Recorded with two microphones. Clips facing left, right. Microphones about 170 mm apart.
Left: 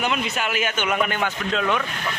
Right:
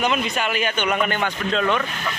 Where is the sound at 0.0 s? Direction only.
5° left (ahead or behind).